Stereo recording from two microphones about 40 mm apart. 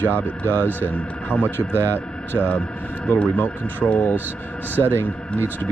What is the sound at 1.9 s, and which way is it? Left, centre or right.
Speech, left.